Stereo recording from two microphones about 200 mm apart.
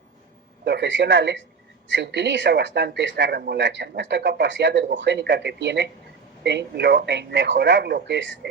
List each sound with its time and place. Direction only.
0.6 s speech: 60° right (ahead or behind)